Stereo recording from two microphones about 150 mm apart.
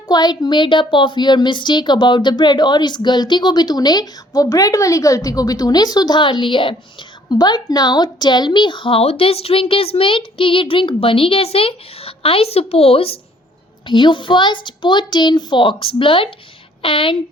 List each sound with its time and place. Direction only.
0.1 s a woman's voice: 30° left (ahead or behind)